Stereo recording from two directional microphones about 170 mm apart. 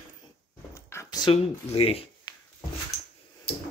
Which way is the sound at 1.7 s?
35° left (ahead or behind).